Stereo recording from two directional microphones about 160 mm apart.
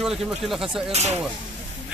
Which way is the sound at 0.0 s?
5° right (ahead or behind).